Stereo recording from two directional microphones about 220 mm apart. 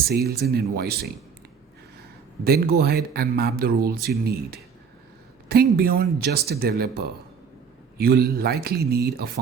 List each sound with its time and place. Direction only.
0.1 s speech: 45° right (ahead or behind)
2.4 s speech: 45° right (ahead or behind)
5.7 s speech: 45° right (ahead or behind)